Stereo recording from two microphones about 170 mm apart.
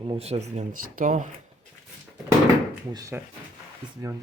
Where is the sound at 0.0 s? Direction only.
35° right (ahead or behind).